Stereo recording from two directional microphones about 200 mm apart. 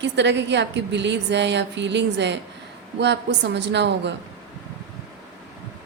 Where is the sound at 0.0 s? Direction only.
60° right (ahead or behind).